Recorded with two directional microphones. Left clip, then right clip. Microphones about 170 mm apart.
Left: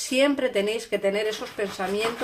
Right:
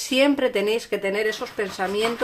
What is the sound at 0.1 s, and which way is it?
Speech, 30° right (ahead or behind).